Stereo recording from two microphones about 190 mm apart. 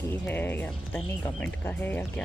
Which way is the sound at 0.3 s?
10° left (ahead or behind).